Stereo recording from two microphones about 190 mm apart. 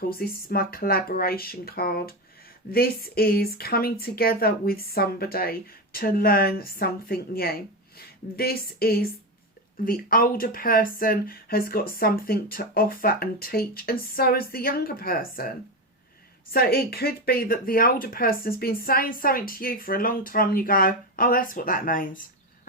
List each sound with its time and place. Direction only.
0.2 s speech: 50° left (ahead or behind)